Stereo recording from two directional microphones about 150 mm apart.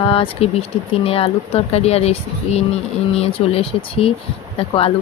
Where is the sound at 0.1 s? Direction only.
40° left (ahead or behind).